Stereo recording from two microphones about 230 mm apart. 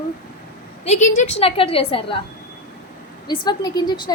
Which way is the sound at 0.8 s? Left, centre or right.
Left.